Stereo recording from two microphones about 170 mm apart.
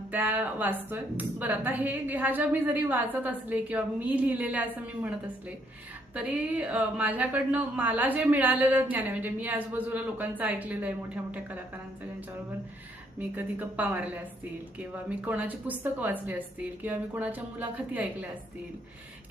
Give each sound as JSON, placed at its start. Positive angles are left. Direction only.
{"t": 0.1, "sound": "a woman's voice", "side_deg": -10}
{"t": 13.1, "sound": "a woman's voice", "side_deg": -10}